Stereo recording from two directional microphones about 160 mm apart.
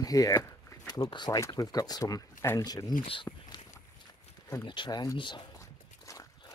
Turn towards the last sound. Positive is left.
turn(degrees=20)  # may be behind; listen again after turning